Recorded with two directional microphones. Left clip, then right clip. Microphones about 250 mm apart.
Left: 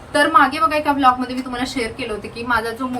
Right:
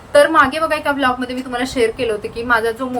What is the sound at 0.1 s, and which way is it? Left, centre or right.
A woman's voice, centre.